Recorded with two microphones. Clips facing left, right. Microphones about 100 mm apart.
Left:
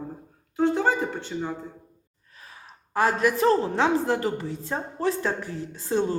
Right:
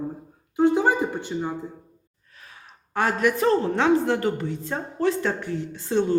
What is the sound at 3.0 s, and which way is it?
A woman's voice, 30° left (ahead or behind).